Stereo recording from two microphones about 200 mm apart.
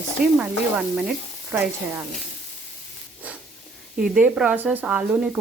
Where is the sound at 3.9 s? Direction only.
5° right (ahead or behind).